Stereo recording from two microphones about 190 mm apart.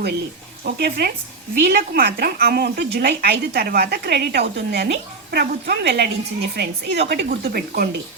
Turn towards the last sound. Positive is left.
turn(degrees=-55)  # may be behind; listen again after turning